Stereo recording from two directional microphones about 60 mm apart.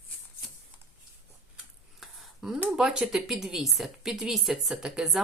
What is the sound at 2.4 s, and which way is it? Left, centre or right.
A woman's voice, centre.